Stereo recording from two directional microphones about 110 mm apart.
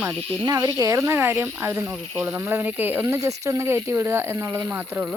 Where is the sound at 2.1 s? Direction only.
10° right (ahead or behind).